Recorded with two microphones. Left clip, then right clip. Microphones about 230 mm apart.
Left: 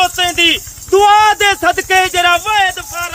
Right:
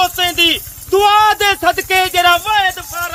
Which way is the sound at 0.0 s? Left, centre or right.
Left.